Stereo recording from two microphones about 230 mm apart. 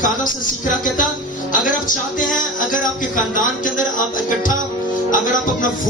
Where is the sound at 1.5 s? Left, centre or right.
Left.